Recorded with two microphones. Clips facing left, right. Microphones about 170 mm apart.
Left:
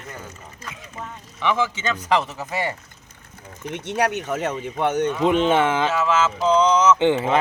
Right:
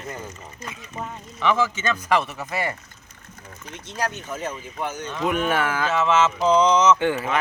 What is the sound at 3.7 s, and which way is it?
Speech, 70° left (ahead or behind).